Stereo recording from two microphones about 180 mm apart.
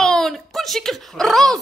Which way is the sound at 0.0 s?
Centre (ahead or behind).